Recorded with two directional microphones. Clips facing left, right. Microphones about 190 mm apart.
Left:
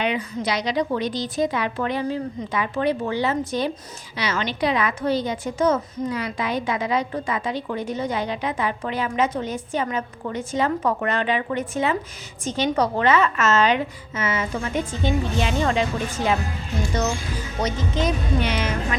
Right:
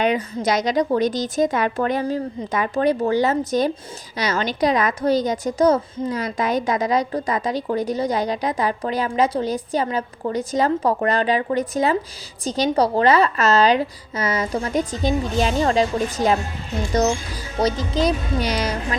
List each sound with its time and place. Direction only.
0.0 s a woman's voice: 45° right (ahead or behind)
17.6 s a woman's voice: 35° right (ahead or behind)